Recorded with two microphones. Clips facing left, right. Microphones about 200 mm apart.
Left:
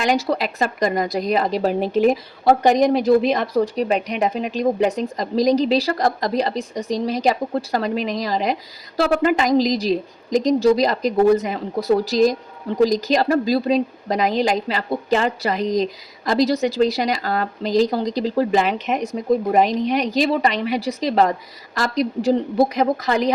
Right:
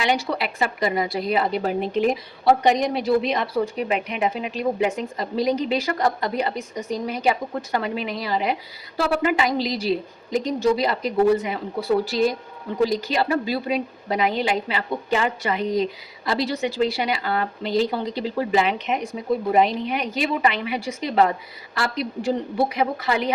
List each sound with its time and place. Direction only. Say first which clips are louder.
0.0 s a woman's voice: left 4 dB; 40° left (ahead or behind)
2.0 s a woman's voice: left 6 dB; 50° left (ahead or behind)